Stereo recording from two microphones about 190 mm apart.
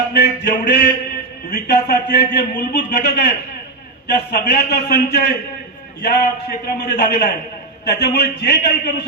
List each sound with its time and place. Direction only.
0.1 s a man's voice: 60° left (ahead or behind)
4.4 s a man's voice: 60° left (ahead or behind)